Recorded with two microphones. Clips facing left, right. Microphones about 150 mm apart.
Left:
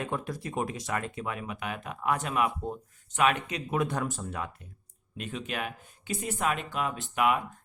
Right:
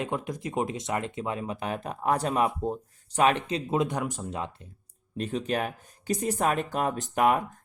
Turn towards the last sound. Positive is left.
turn(degrees=-40)  # may be behind; listen again after turning